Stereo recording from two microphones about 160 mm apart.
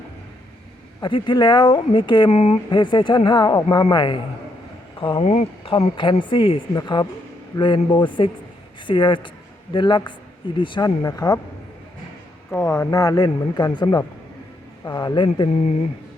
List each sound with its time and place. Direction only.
1.0 s speech: 30° left (ahead or behind)
5.1 s speech: 45° left (ahead or behind)
5.7 s speech: 30° left (ahead or behind)
12.5 s speech: 15° left (ahead or behind)
15.4 s speech: 45° left (ahead or behind)